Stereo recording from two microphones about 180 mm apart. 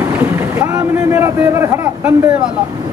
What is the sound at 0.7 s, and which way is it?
A man's voice, 15° right (ahead or behind).